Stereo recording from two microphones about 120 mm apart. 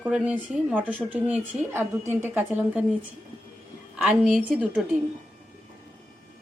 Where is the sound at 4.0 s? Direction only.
5° right (ahead or behind).